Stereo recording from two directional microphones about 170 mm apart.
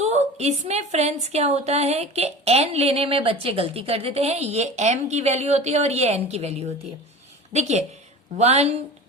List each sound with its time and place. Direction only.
0.0 s a woman's voice: 40° right (ahead or behind)